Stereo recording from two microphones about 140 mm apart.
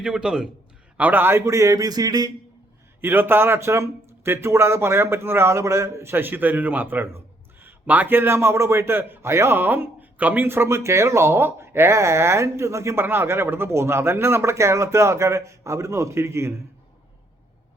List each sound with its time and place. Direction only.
0.0 s a man's voice: 5° right (ahead or behind); by 2.3 s 25° right (ahead or behind)
3.0 s a man's voice: 15° right (ahead or behind)